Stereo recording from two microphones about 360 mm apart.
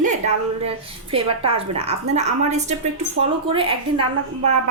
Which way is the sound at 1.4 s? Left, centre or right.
Centre.